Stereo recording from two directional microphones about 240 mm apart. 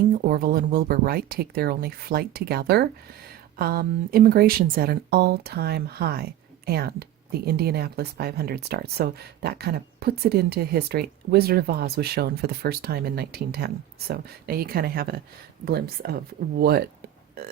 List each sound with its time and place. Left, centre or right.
0.3 s speech: right